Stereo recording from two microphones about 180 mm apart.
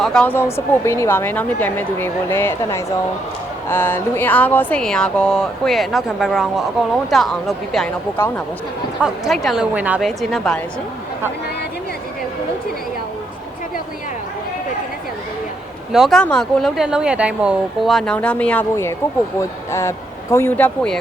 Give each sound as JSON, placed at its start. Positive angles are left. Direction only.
{"t": 0.0, "sound": "a woman's voice", "side_deg": 5}
{"t": 9.0, "sound": "speech", "side_deg": -5}
{"t": 15.9, "sound": "a woman's voice", "side_deg": 0}